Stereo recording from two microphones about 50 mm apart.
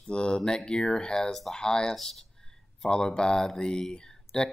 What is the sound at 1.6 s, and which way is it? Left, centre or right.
Speech, centre.